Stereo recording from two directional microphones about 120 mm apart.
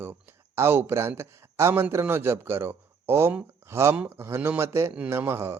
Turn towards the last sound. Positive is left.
turn(degrees=-20)  # may be behind; listen again after turning